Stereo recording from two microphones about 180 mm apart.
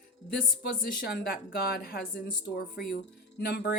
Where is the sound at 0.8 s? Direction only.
55° left (ahead or behind).